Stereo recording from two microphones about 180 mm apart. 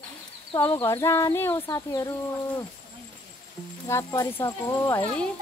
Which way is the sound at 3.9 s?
15° left (ahead or behind).